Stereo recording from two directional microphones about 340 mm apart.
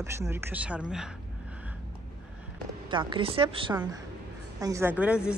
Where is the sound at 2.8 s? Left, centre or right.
Centre.